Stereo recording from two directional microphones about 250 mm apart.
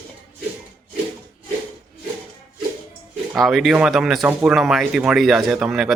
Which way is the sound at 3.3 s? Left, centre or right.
Centre.